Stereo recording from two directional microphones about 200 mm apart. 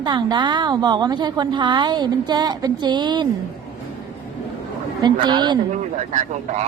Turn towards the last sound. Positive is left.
turn(degrees=-40)  # may be behind; listen again after turning